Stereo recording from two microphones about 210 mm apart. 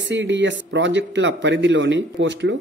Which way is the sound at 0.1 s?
60° right (ahead or behind).